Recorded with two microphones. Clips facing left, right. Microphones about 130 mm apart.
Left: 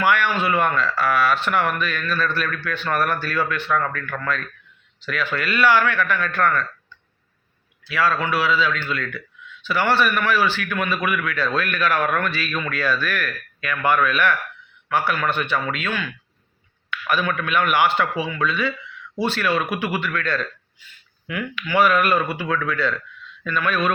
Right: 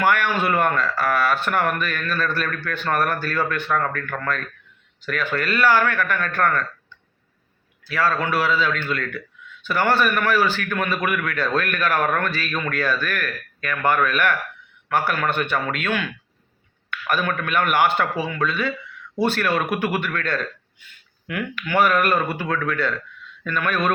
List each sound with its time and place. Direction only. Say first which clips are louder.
0.0 s a man's voice: even; 50° right (ahead or behind)
7.9 s a man's voice: even; 45° right (ahead or behind)